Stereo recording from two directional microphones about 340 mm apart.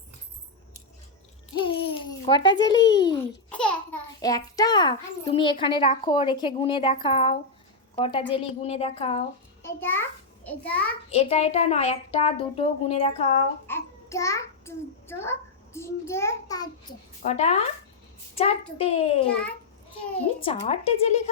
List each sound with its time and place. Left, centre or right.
1.5 s babbling: centre
2.6 s a child's voice: centre
2.8 s speech: left
3.1 s a child's voice: centre
9.6 s a child's voice: centre
11.1 s a child's voice: centre
18.8 s a child's voice: centre
20.4 s a child's voice: centre